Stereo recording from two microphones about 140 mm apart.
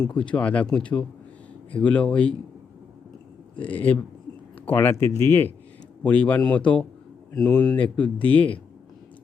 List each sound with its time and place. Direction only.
0.0 s speech: 5° left (ahead or behind)
3.6 s speech: 10° left (ahead or behind)